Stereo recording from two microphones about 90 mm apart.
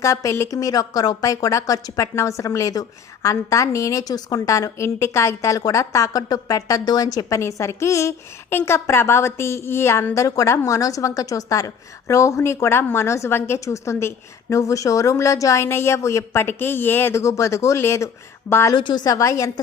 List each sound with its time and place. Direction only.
0.0 s a woman's voice: 35° left (ahead or behind)
18.7 s a woman's voice: 55° left (ahead or behind); by 19.5 s 35° left (ahead or behind)